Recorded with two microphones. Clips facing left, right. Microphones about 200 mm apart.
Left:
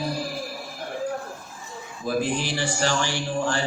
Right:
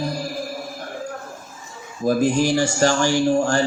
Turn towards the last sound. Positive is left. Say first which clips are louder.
# right 8 dB
turn(degrees=-45)  # may be behind; listen again after turning